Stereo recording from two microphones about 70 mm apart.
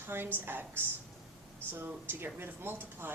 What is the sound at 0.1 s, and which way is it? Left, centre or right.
Speech, right.